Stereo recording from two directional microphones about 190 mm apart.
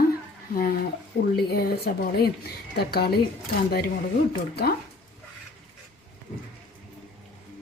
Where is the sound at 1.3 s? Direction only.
55° left (ahead or behind).